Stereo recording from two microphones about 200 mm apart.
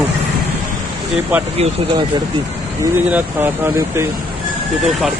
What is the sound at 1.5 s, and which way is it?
Speech, 30° right (ahead or behind).